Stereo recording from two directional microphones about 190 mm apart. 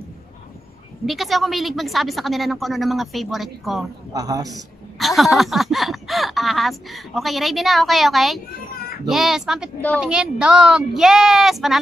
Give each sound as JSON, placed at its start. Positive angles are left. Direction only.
{"t": 1.0, "sound": "a woman's voice", "side_deg": 0}
{"t": 4.1, "sound": "a woman's voice", "side_deg": -20}
{"t": 4.5, "sound": "a woman's voice", "side_deg": 0}